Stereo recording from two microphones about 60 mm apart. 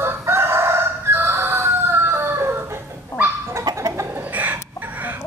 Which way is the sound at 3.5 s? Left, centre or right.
Right.